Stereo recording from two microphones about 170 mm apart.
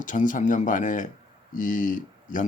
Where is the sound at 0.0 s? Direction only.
50° left (ahead or behind).